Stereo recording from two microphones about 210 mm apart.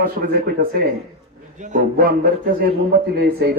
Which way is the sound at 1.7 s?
45° right (ahead or behind).